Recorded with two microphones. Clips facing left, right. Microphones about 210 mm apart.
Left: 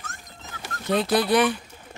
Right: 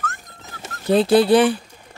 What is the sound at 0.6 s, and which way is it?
Speech, 30° right (ahead or behind).